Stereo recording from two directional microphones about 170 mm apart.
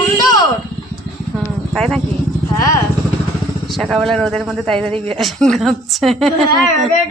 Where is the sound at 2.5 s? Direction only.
20° left (ahead or behind).